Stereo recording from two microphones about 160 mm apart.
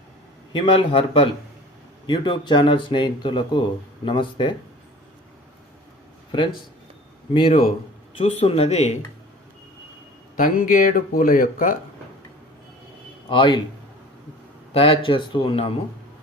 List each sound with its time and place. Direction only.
0.5 s speech: 35° left (ahead or behind)
7.3 s speech: 30° left (ahead or behind)
10.3 s speech: 60° left (ahead or behind)
13.3 s speech: 30° left (ahead or behind)
14.7 s speech: 35° left (ahead or behind)